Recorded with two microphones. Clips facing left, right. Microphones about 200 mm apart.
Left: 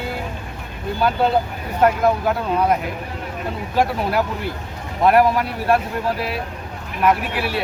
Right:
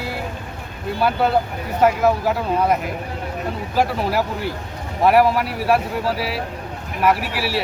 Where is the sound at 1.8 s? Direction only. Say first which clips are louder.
Even; 5° right (ahead or behind).